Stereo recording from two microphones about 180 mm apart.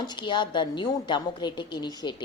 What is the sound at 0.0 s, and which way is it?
A woman's voice, 25° left (ahead or behind).